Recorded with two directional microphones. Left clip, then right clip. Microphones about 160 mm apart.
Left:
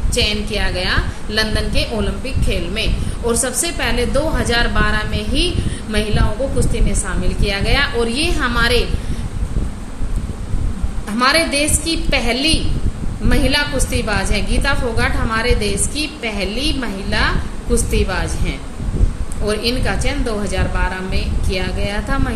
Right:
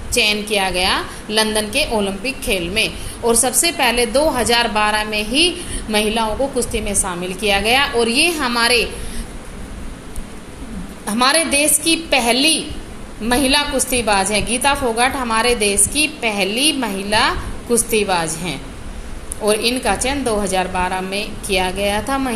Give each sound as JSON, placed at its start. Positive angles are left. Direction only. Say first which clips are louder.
{"t": 0.1, "sound": "a woman's voice", "louder": "right 3 dB", "side_deg": -30}
{"t": 7.4, "sound": "a woman's voice", "louder": "right 3 dB", "side_deg": -30}
{"t": 11.1, "sound": "a woman's voice", "louder": "left 1 dB", "side_deg": -25}